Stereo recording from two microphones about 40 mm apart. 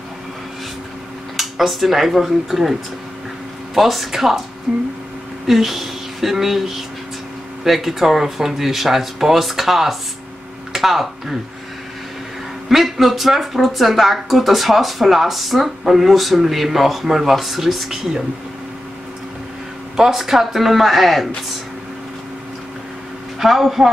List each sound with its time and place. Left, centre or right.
1.3 s speech: centre
12.6 s speech: centre
20.0 s speech: centre
23.4 s speech: centre